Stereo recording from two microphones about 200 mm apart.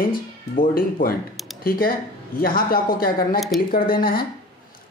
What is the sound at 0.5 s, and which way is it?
Speech, 45° left (ahead or behind).